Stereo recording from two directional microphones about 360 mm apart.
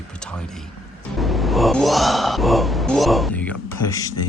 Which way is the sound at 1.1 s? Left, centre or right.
Centre.